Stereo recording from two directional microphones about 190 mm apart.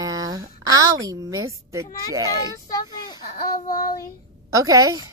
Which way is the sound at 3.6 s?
50° left (ahead or behind).